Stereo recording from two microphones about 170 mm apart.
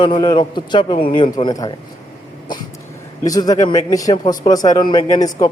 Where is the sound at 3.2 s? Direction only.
20° left (ahead or behind).